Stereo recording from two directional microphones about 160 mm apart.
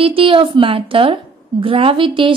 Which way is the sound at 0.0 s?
35° right (ahead or behind).